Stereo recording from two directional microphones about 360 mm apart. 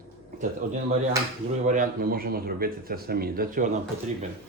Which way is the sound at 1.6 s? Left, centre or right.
Right.